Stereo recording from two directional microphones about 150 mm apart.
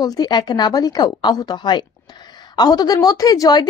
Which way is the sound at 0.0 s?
25° left (ahead or behind).